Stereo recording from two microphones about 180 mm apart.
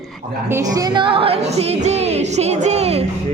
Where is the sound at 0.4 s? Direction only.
15° right (ahead or behind); by 3.1 s 35° right (ahead or behind).